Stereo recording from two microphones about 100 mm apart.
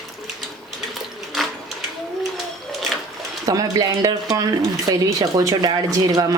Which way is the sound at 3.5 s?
40° right (ahead or behind).